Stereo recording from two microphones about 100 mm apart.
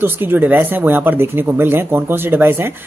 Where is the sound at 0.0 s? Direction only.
20° right (ahead or behind).